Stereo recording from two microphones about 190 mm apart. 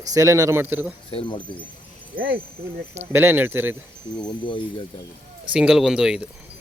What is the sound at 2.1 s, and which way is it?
Speech, 65° right (ahead or behind).